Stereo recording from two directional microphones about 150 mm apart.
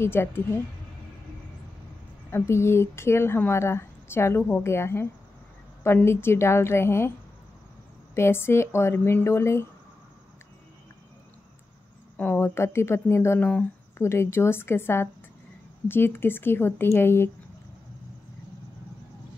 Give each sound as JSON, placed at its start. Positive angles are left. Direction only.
{"t": 0.0, "sound": "speech", "side_deg": 15}
{"t": 2.3, "sound": "speech", "side_deg": 15}
{"t": 8.1, "sound": "speech", "side_deg": 15}
{"t": 12.2, "sound": "speech", "side_deg": 15}